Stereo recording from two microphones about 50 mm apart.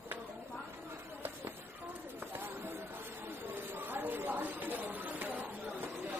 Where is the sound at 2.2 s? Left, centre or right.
Right.